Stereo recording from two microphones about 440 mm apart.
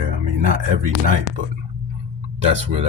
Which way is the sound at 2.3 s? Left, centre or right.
Right.